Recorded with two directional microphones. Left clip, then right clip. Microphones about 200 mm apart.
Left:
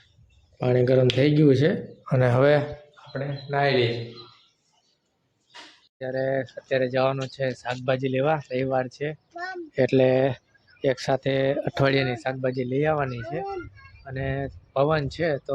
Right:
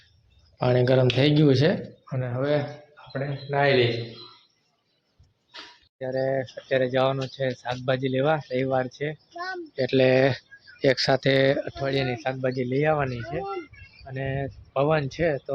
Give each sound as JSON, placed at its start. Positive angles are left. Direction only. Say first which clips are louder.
{"t": 0.6, "sound": "a child's voice", "louder": "even", "side_deg": -5}
{"t": 2.0, "sound": "speech", "louder": "left 12 dB", "side_deg": 50}
{"t": 2.4, "sound": "speech", "louder": "left 4 dB", "side_deg": 30}
{"t": 2.9, "sound": "a man's voice", "louder": "even", "side_deg": -10}
{"t": 6.0, "sound": "a child's voice", "louder": "even", "side_deg": -5}
{"t": 9.9, "sound": "speech", "louder": "right 1 dB", "side_deg": 10}
{"t": 10.2, "sound": "speech", "louder": "right 2 dB", "side_deg": -5}
{"t": 12.0, "sound": "a child's voice", "louder": "even", "side_deg": 5}